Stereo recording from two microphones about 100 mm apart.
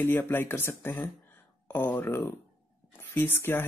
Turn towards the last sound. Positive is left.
turn(degrees=20)  # may be behind; listen again after turning